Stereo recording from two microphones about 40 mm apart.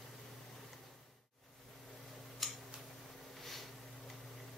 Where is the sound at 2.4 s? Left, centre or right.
Centre.